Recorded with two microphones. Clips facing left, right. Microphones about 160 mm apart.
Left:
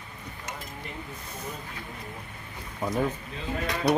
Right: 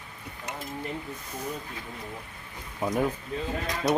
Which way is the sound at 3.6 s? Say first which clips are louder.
Left 3 dB; 65° left (ahead or behind).